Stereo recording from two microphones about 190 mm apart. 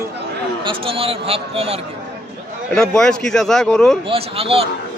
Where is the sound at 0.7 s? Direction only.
30° right (ahead or behind).